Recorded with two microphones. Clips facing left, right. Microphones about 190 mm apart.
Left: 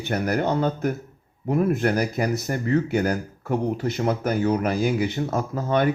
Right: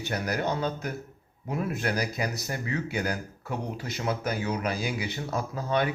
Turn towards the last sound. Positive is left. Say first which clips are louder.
# left 5 dB
turn(degrees=50)  # may be behind; listen again after turning